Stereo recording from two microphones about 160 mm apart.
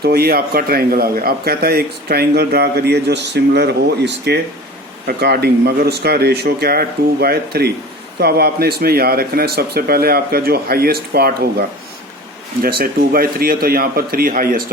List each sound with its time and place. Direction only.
0.0 s a man's voice: 75° right (ahead or behind)
12.8 s a man's voice: 65° right (ahead or behind)